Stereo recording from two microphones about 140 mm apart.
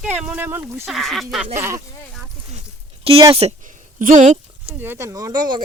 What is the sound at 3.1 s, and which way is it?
Speech, 40° right (ahead or behind).